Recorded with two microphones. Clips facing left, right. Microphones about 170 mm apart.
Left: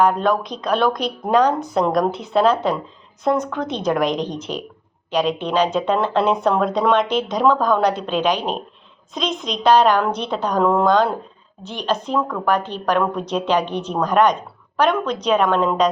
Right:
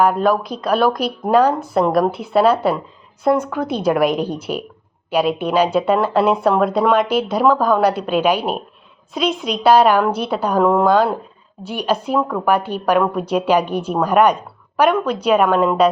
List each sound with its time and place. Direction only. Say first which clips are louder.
0.0 s a woman's voice: right 2 dB; 5° right (ahead or behind)